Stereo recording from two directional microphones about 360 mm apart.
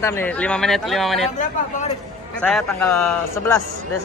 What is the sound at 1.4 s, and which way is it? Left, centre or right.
Speech, centre.